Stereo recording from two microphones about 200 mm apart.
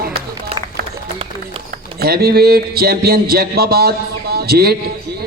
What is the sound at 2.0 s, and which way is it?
A man's voice, 50° right (ahead or behind).